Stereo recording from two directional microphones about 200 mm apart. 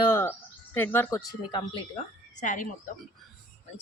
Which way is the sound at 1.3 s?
25° left (ahead or behind).